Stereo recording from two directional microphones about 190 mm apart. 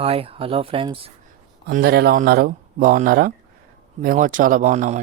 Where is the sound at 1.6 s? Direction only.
55° right (ahead or behind).